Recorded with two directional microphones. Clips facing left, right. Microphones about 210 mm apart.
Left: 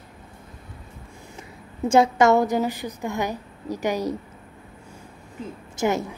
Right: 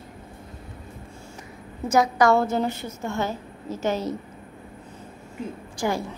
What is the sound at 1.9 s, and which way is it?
A woman's voice, 25° left (ahead or behind).